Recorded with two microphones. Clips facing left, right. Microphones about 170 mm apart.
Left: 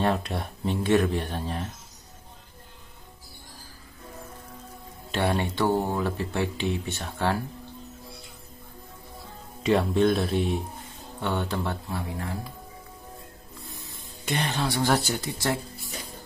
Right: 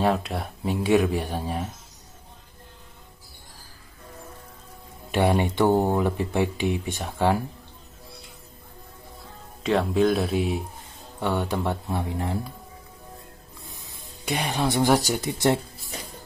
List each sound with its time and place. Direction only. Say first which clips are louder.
0.0 s speech: right 2 dB; 5° right (ahead or behind)
5.1 s speech: right 4 dB; 15° right (ahead or behind)
9.6 s speech: even; centre (ahead or behind); by 12.4 s 20° right (ahead or behind)
14.2 s speech: right 2 dB; 10° right (ahead or behind)